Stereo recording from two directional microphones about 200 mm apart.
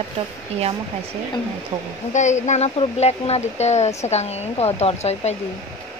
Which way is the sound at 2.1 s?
35° left (ahead or behind).